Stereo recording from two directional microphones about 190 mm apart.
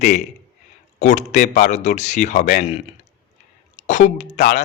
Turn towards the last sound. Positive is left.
turn(degrees=40)  # may be behind; listen again after turning